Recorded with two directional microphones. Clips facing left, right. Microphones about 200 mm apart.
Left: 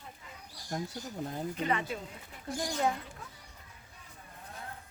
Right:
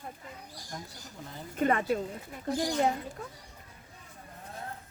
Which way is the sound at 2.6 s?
20° right (ahead or behind).